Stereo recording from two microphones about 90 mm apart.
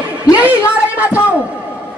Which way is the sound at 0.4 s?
15° right (ahead or behind).